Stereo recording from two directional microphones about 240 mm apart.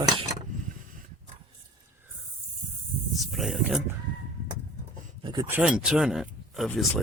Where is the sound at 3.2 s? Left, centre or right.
Centre.